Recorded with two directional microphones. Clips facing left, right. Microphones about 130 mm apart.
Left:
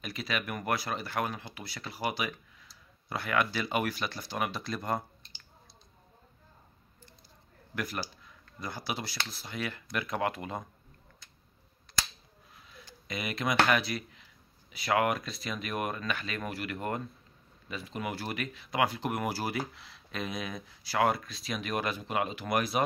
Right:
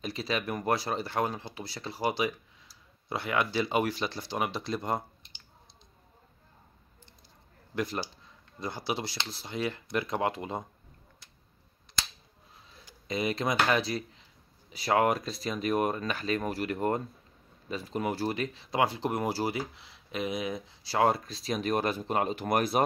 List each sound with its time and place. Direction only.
0.0 s speech: 30° right (ahead or behind)
7.7 s speech: 25° right (ahead or behind)
13.1 s speech: 30° right (ahead or behind)